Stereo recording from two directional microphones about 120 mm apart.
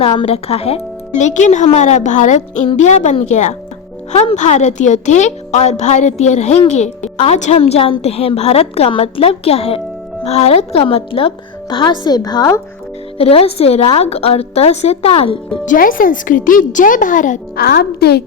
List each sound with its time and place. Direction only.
0.0 s speech: 55° left (ahead or behind); by 2.6 s 85° left
2.7 s speech: 75° left (ahead or behind)
4.1 s a woman's voice: 65° left (ahead or behind); by 12.5 s 35° left (ahead or behind)
13.1 s a woman's voice: 55° left (ahead or behind)
15.6 s speech: 90° left